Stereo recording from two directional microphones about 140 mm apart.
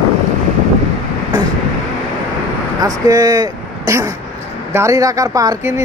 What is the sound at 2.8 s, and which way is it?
Speech, 25° right (ahead or behind).